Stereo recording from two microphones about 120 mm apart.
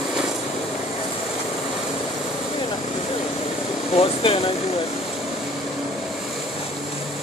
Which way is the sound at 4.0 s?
50° left (ahead or behind).